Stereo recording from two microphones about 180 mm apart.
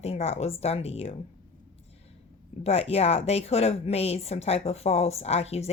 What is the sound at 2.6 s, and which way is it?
A woman's voice, 35° left (ahead or behind).